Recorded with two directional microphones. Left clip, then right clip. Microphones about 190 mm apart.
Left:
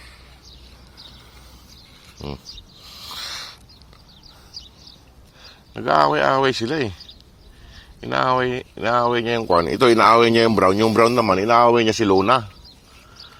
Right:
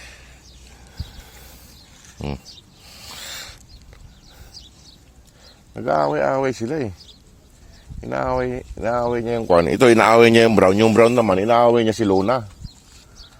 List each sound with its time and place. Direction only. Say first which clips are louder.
2.5 s a sound: left 3 dB; 35° right (ahead or behind)
5.7 s speech: left 3 dB; 20° right (ahead or behind)
6.1 s speech: left 2 dB; centre (ahead or behind)
8.0 s speech: left 3 dB; centre (ahead or behind)
9.2 s speech: left 1 dB; 20° right (ahead or behind)
9.5 s speech: right 3 dB; 45° right (ahead or behind)
12.1 s speech: left 4 dB; 20° right (ahead or behind)